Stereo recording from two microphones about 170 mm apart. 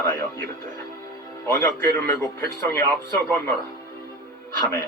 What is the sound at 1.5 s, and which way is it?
A man's voice, 15° left (ahead or behind).